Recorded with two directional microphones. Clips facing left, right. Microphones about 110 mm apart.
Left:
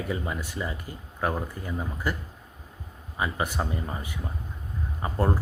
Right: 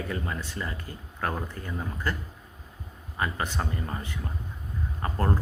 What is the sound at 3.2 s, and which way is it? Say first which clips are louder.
Speech: left 2 dB; 10° left (ahead or behind).